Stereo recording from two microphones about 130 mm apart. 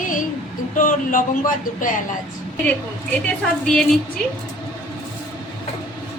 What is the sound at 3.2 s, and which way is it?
Speech, 5° left (ahead or behind).